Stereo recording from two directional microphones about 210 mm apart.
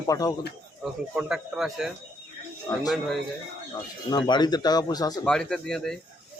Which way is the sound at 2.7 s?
15° left (ahead or behind).